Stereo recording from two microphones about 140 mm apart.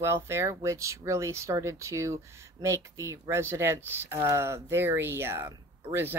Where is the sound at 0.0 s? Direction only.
20° right (ahead or behind).